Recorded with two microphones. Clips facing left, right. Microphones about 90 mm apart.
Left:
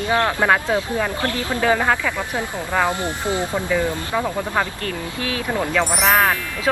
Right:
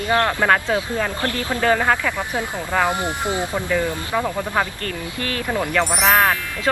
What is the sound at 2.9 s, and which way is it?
Speech, 20° right (ahead or behind).